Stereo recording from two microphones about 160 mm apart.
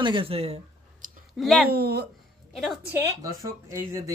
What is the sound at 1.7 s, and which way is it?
Speech, 80° right.